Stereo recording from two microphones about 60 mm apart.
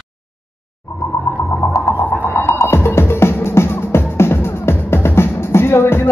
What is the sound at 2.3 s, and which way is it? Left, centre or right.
Music, left.